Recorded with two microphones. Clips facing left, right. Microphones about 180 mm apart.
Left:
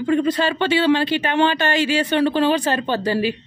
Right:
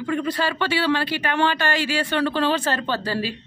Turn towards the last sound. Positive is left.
turn(degrees=15)  # may be behind; listen again after turning